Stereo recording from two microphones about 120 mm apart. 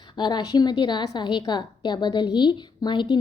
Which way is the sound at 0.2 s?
40° left (ahead or behind).